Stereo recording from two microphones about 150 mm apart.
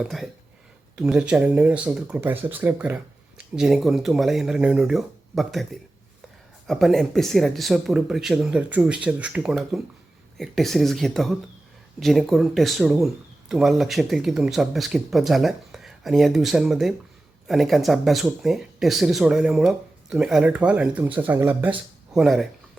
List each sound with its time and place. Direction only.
0.0 s speech: centre (ahead or behind)